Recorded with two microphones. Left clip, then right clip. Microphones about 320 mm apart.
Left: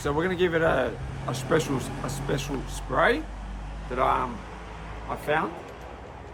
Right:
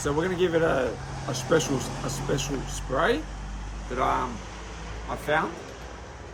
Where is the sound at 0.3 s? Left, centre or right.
Left.